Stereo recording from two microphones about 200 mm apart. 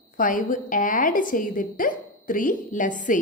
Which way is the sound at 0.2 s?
40° left (ahead or behind).